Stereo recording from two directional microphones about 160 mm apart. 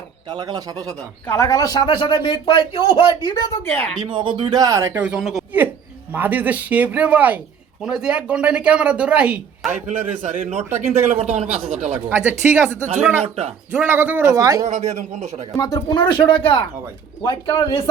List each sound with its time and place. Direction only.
0.3 s speech: 25° right (ahead or behind)
1.3 s speech: 20° left (ahead or behind)
4.0 s speech: 30° right (ahead or behind); by 9.7 s 5° right (ahead or behind)
9.8 s a man's voice: 45° right (ahead or behind)
10.7 s speech: 15° right (ahead or behind)
11.1 s a man's voice: 45° right (ahead or behind)
12.0 s speech: 10° right (ahead or behind)
13.2 s speech: 40° right (ahead or behind)
13.7 s speech: 10° right (ahead or behind)
14.7 s a man's voice: 45° right (ahead or behind)
15.5 s speech: 20° left (ahead or behind)